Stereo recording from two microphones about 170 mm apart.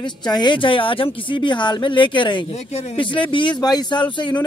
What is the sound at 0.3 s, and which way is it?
Speech, 25° left (ahead or behind).